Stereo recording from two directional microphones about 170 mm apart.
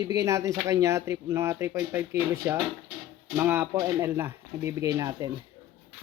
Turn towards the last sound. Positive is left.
turn(degrees=-20)  # may be behind; listen again after turning